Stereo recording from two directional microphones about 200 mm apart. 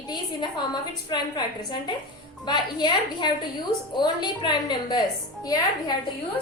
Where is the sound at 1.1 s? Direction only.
20° left (ahead or behind).